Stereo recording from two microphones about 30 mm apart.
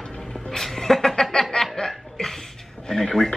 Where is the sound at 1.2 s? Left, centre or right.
Left.